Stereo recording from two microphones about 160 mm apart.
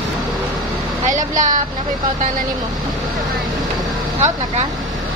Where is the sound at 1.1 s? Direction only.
55° right (ahead or behind).